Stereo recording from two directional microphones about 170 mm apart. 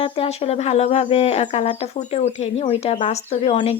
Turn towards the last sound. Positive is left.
turn(degrees=35)  # may be behind; listen again after turning